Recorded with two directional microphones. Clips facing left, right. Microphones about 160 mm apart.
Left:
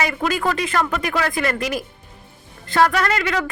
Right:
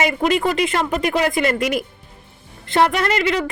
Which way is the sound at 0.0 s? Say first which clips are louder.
Right 3 dB; 25° right (ahead or behind).